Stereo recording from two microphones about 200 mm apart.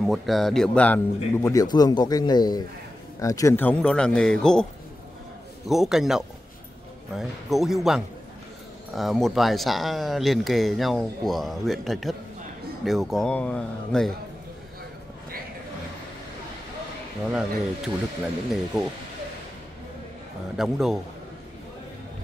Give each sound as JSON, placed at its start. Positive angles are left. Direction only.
{"t": 0.0, "sound": "speech", "side_deg": 0}
{"t": 5.7, "sound": "speech", "side_deg": 0}
{"t": 17.3, "sound": "speech", "side_deg": -5}
{"t": 20.5, "sound": "speech", "side_deg": 0}